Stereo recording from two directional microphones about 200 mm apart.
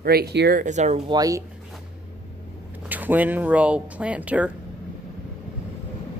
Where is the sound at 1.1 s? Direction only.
15° right (ahead or behind).